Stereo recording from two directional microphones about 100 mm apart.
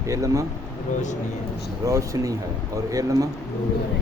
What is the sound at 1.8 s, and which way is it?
Speech, 35° right (ahead or behind).